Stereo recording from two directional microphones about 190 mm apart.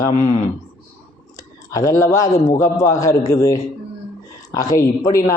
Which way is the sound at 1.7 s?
15° left (ahead or behind).